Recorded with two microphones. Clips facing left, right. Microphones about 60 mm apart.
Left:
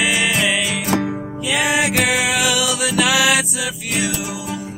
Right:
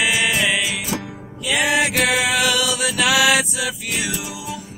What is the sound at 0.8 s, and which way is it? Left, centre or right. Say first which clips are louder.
Music: left 7 dB; left.